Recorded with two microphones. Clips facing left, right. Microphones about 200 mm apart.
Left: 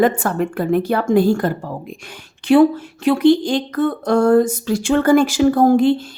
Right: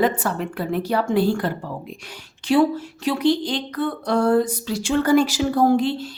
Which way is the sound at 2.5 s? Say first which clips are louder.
Left 6 dB; 55° left (ahead or behind).